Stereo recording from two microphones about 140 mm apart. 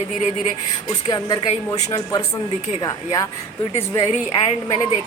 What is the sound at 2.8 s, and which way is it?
Speech, 30° left (ahead or behind).